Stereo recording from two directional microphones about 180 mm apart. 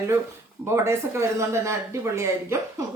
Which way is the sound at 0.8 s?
15° right (ahead or behind).